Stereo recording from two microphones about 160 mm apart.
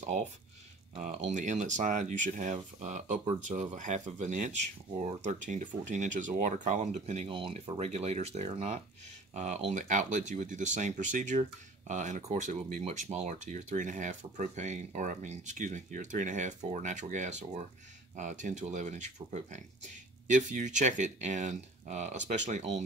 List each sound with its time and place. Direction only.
0.9 s speech: 45° right (ahead or behind)